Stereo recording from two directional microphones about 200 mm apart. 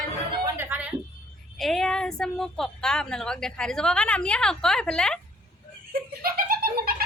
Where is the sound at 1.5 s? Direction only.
Centre (ahead or behind).